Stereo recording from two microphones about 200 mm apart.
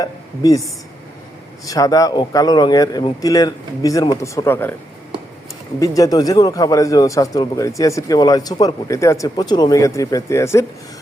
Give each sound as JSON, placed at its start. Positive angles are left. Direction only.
{"t": 0.0, "sound": "a woman's voice", "side_deg": 20}
{"t": 1.6, "sound": "speech", "side_deg": 15}
{"t": 5.8, "sound": "speech", "side_deg": 15}